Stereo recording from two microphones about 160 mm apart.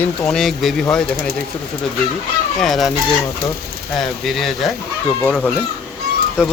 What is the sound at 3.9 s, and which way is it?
Speech, centre (ahead or behind).